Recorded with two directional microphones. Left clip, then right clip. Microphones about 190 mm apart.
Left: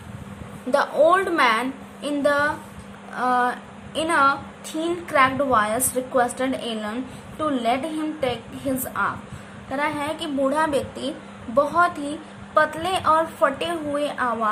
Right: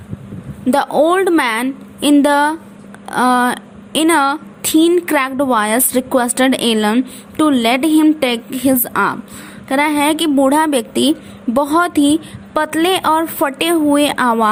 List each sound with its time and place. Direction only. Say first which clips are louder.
0.7 s a woman's voice: right 5 dB; 40° right (ahead or behind)